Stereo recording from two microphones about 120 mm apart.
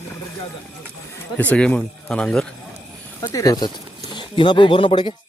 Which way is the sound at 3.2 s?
30° left (ahead or behind).